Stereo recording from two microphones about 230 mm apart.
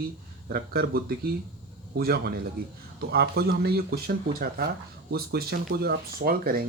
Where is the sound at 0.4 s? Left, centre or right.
Right.